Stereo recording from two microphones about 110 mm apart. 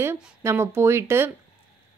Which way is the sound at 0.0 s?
25° right (ahead or behind).